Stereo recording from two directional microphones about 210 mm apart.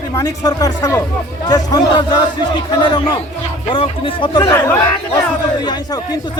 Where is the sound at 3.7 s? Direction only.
25° left (ahead or behind).